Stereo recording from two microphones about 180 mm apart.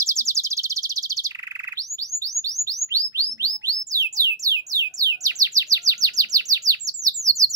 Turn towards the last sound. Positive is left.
turn(degrees=-20)  # may be behind; listen again after turning